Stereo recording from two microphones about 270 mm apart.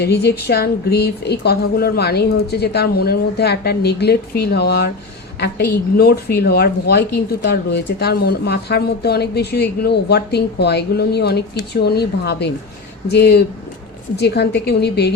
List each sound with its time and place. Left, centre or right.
0.0 s speech: left